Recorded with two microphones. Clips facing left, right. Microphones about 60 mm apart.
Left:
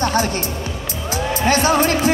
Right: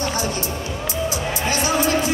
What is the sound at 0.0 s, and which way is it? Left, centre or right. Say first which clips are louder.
Music: left 5 dB; left.